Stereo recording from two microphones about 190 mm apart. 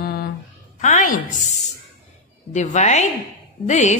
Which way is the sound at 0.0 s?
55° left (ahead or behind).